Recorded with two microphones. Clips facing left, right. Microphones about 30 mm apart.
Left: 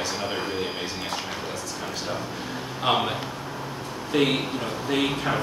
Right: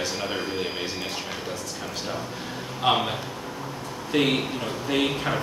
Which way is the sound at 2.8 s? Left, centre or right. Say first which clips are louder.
Right 1 dB; centre.